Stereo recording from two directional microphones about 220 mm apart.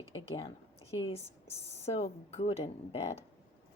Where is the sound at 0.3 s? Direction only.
25° left (ahead or behind).